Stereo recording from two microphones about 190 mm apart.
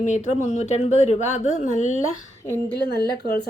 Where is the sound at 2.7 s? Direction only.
55° left (ahead or behind).